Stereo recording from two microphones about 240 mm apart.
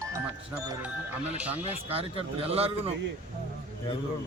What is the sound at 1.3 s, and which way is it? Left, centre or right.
Speech, centre.